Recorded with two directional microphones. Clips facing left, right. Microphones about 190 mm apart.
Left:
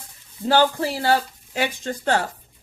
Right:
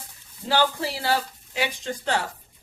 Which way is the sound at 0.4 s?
50° left (ahead or behind).